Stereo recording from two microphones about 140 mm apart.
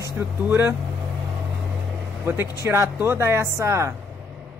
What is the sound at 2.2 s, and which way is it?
Speech, 15° right (ahead or behind).